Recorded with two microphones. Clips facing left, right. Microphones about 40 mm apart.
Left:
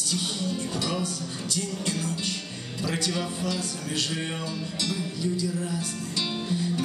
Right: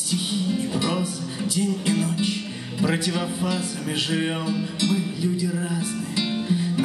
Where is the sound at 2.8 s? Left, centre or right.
Centre.